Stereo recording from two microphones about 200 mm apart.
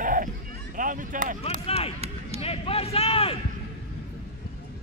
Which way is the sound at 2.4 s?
30° left (ahead or behind).